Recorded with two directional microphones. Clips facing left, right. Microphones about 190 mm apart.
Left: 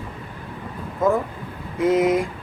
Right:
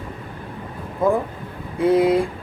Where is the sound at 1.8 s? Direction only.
30° right (ahead or behind).